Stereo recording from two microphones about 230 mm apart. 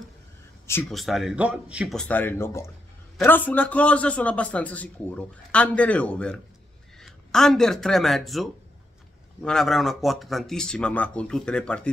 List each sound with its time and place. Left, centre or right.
0.7 s a man's voice: centre